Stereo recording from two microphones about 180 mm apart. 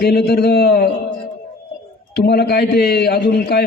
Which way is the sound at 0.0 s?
60° left (ahead or behind).